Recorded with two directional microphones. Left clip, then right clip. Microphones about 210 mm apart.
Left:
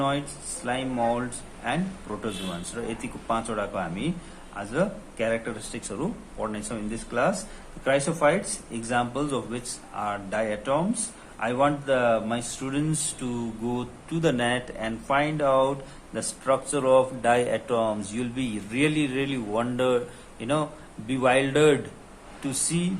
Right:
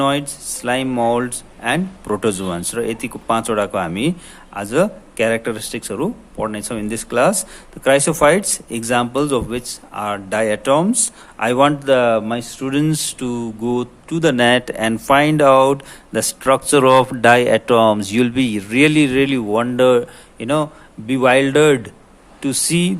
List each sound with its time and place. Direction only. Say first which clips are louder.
0.0 s speech: right 9 dB; 50° right (ahead or behind)